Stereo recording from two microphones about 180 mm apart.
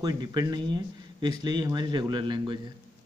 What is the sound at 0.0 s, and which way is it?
Speech, 20° right (ahead or behind).